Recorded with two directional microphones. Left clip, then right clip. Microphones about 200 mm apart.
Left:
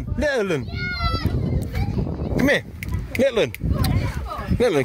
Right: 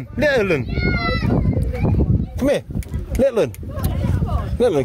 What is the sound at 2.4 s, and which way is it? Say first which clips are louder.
Speech: even; 5° right (ahead or behind).